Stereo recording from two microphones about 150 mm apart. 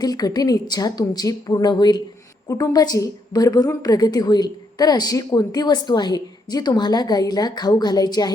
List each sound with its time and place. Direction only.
0.0 s a woman's voice: 25° left (ahead or behind)